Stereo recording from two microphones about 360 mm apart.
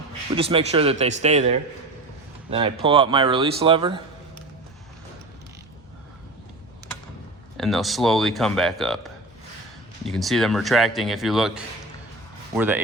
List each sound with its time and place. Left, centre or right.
0.3 s a man's voice: centre
7.5 s speech: centre